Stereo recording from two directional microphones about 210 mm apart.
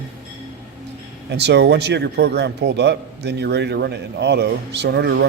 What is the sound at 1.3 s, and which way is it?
Speech, 55° right (ahead or behind).